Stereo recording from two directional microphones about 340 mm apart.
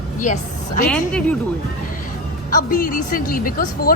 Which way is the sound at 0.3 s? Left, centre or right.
Left.